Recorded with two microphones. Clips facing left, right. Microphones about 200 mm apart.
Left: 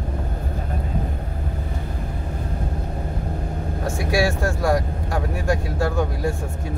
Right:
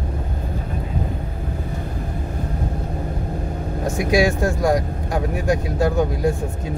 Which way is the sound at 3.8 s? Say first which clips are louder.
Right 4 dB; 20° right (ahead or behind).